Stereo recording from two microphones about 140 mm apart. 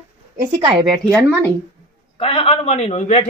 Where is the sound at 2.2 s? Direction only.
45° left (ahead or behind).